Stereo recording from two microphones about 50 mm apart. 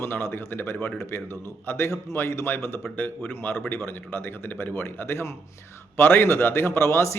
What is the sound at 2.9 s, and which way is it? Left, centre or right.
A man's voice, left.